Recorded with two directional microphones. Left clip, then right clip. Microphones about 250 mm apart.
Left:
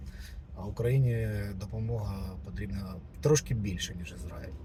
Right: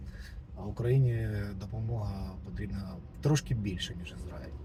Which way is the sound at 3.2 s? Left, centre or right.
Centre.